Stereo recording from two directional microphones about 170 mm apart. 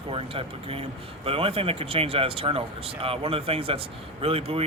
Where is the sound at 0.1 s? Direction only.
35° right (ahead or behind).